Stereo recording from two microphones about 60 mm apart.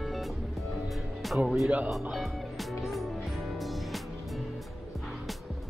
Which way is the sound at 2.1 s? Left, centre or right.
Centre.